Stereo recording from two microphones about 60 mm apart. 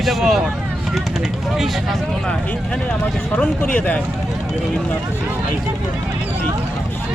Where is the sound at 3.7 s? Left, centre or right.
Left.